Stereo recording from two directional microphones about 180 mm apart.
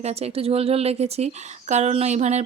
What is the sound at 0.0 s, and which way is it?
Speech, 35° right (ahead or behind).